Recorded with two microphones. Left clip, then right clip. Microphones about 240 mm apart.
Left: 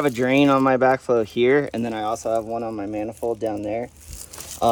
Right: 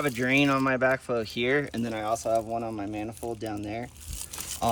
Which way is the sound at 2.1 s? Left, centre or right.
Left.